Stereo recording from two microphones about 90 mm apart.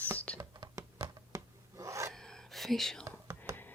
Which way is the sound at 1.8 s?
35° right (ahead or behind).